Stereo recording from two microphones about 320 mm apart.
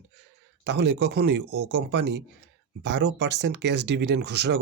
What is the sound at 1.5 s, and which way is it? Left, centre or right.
Speech, right.